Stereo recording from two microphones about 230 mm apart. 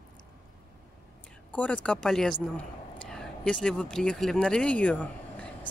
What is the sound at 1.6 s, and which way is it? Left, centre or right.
Speech, centre.